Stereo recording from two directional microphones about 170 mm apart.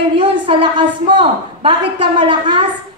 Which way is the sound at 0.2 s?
30° right (ahead or behind).